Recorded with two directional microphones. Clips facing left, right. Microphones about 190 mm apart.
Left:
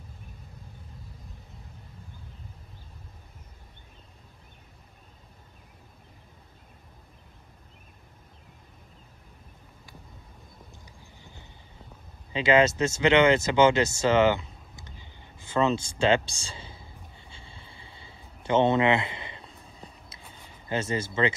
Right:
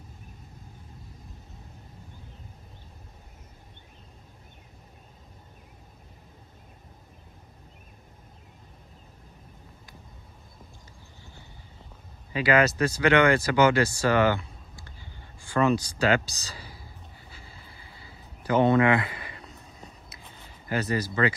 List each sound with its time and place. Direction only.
12.3 s speech: 25° left (ahead or behind)
17.3 s a sound: 25° left (ahead or behind)
20.6 s speech: 25° left (ahead or behind)